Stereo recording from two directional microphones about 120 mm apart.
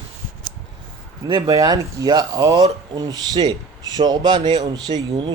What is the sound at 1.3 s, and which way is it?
Speech, 30° right (ahead or behind).